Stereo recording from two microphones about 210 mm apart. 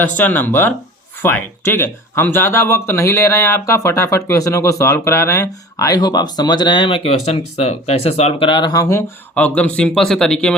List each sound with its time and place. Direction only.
0.0 s speech: 10° left (ahead or behind)